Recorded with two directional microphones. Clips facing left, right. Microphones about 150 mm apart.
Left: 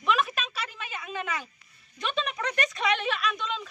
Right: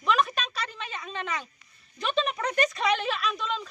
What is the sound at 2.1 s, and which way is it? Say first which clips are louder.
Speech: right 5 dB; 35° right (ahead or behind).